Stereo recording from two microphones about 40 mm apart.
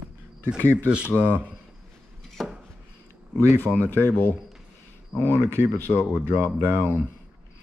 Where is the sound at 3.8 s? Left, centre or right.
Left.